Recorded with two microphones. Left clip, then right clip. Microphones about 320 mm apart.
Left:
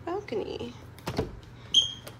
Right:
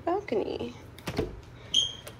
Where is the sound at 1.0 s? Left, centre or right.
Left.